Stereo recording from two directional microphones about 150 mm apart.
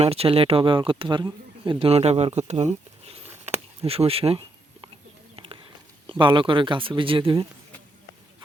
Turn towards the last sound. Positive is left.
turn(degrees=-30)  # may be behind; listen again after turning